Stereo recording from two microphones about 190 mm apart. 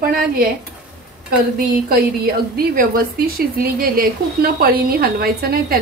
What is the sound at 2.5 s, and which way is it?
Speech, 50° right (ahead or behind).